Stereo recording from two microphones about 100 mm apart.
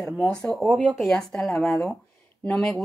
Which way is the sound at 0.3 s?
5° left (ahead or behind).